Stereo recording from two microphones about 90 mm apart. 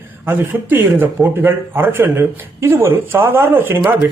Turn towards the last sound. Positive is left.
turn(degrees=-25)  # may be behind; listen again after turning